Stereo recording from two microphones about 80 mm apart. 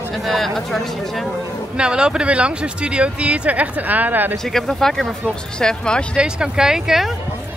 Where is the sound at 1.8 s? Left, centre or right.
Centre.